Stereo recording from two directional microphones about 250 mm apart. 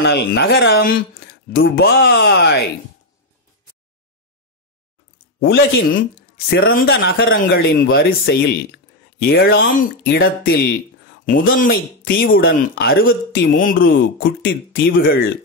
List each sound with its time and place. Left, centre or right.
0.0 s a man's voice: left
5.4 s a man's voice: left
13.8 s speech: left
14.7 s a man's voice: left